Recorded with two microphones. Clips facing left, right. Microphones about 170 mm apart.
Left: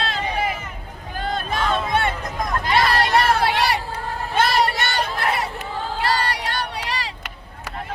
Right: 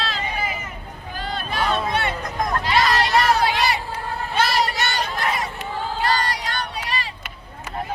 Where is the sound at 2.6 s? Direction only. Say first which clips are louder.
Left 2 dB; 55° left (ahead or behind).